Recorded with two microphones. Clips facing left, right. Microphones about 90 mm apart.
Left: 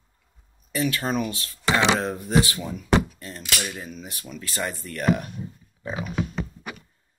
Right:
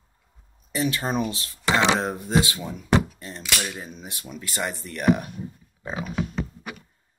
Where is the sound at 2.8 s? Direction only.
25° right (ahead or behind).